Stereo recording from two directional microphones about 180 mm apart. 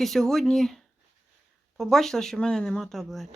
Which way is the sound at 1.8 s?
Centre (ahead or behind).